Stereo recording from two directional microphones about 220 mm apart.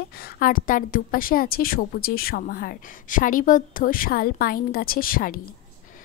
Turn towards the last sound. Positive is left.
turn(degrees=40)  # may be behind; listen again after turning